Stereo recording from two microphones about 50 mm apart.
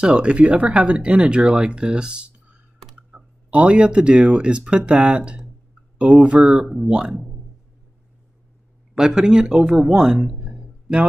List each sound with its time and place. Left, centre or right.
0.0 s speech: centre
6.4 s speech: centre
8.9 s speech: centre
9.8 s a sound: centre